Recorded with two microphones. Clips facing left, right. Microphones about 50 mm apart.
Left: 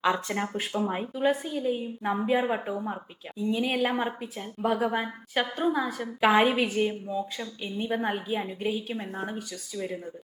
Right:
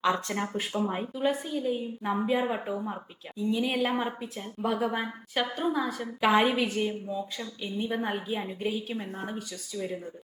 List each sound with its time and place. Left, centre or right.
0.0 s a woman's voice: centre
5.3 s a woman's voice: left
5.7 s a woman's voice: centre